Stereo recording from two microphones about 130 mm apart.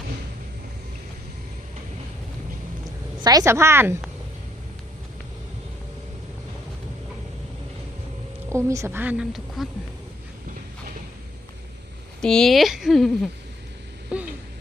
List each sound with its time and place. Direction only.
3.2 s a woman's voice: 30° right (ahead or behind)
8.4 s a woman's voice: 20° right (ahead or behind)
9.6 s speech: centre (ahead or behind)
12.2 s speech: 5° left (ahead or behind)
14.1 s a sound: 10° right (ahead or behind)